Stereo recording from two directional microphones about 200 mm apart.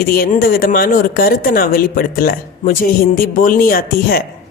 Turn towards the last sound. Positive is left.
turn(degrees=50)  # may be behind; listen again after turning